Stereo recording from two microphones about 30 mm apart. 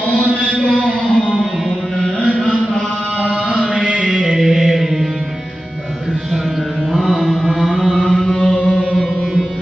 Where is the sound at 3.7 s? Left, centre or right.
Right.